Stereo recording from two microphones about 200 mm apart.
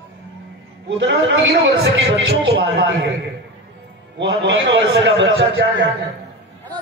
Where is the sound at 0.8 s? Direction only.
65° right (ahead or behind).